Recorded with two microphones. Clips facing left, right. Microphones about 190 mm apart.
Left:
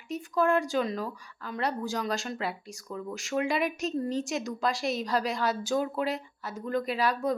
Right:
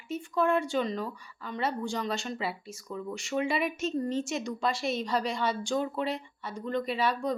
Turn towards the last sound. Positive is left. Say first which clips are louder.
# left 1 dB
turn(degrees=0)  # may be behind; listen again after turning